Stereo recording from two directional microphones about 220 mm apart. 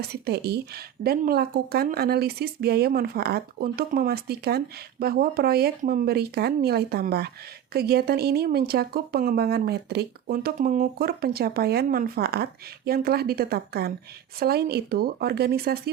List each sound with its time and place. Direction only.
0.0 s speech: 45° right (ahead or behind)